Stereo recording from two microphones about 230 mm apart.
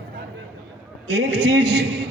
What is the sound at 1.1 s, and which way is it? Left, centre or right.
Speech, right.